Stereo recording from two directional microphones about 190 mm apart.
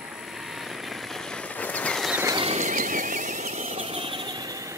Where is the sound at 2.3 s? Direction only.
35° right (ahead or behind).